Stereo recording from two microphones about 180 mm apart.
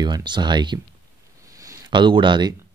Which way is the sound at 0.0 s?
25° right (ahead or behind).